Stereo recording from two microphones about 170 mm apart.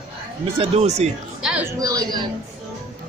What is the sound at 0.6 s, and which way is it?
Speech, 40° right (ahead or behind).